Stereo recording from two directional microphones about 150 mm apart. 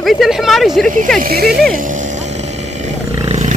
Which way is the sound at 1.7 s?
60° right (ahead or behind).